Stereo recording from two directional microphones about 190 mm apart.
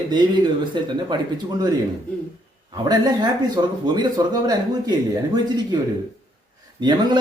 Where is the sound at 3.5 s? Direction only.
20° right (ahead or behind).